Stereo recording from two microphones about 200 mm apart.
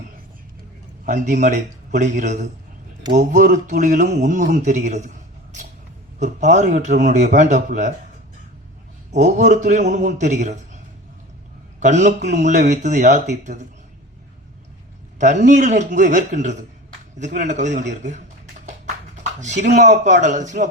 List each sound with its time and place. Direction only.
1.0 s a man's voice: 40° right (ahead or behind)
6.1 s a man's voice: 35° right (ahead or behind)
9.1 s a man's voice: 35° right (ahead or behind)
11.8 s a man's voice: 35° right (ahead or behind)
15.2 s a man's voice: 40° right (ahead or behind)
19.4 s a man's voice: 35° right (ahead or behind)